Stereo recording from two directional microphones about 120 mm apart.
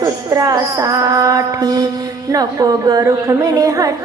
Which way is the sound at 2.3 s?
30° right (ahead or behind).